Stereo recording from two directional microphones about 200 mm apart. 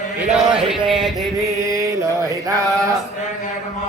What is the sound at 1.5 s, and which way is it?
Mantra, 15° right (ahead or behind).